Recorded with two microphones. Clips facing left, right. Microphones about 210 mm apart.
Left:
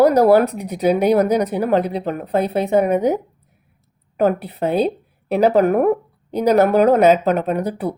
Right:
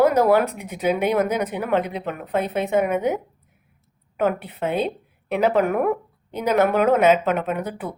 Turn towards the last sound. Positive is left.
turn(degrees=35)  # may be behind; listen again after turning